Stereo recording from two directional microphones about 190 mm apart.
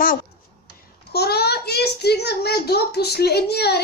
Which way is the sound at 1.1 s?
55° left (ahead or behind).